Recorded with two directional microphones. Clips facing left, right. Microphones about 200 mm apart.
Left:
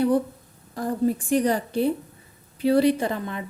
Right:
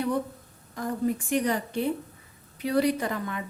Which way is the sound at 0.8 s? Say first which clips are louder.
Left 4 dB; 35° left (ahead or behind).